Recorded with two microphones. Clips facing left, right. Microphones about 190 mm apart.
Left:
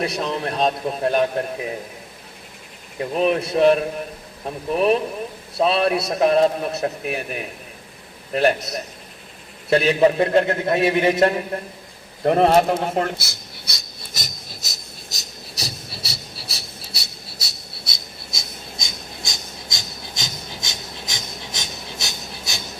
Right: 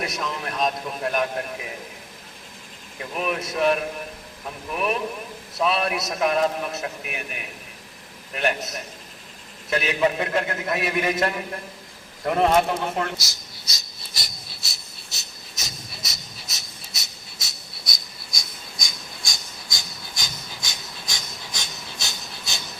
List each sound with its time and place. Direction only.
0.0 s a man's voice: 30° left (ahead or behind)
3.0 s a man's voice: 30° left (ahead or behind)
13.1 s a sound: 55° left (ahead or behind); by 22.6 s 15° left (ahead or behind)